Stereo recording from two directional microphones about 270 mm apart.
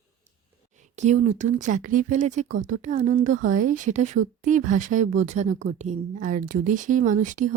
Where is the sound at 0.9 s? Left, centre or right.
Right.